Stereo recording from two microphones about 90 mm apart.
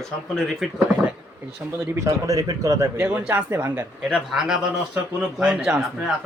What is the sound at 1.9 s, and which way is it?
Speech, 40° right (ahead or behind).